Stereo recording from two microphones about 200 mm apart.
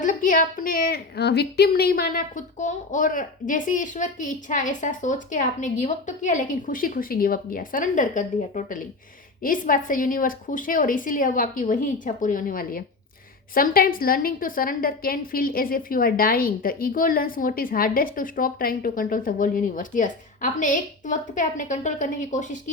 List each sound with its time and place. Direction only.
0.0 s a woman's voice: 40° left (ahead or behind)